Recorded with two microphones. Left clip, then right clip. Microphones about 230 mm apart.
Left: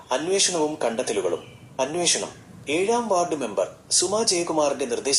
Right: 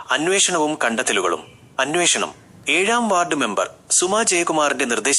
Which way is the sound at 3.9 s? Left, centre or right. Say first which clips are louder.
Right 4 dB; right.